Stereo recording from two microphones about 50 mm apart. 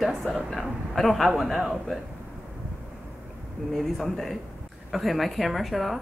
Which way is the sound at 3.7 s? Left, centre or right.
Centre.